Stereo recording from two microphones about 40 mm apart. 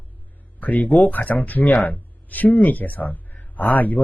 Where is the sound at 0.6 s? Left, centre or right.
Left.